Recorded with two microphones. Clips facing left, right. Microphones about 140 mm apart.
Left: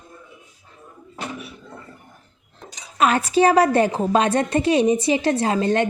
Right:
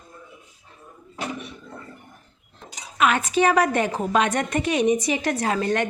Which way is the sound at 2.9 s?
35° left (ahead or behind).